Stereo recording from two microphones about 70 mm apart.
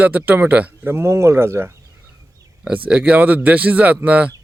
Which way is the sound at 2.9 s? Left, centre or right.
Centre.